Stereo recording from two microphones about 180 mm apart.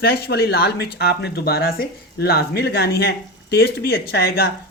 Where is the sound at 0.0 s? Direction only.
65° left (ahead or behind).